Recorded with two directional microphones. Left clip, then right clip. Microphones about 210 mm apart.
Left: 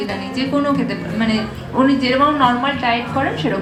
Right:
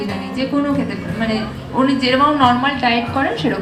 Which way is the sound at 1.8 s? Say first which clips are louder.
Left 1 dB; 10° right (ahead or behind).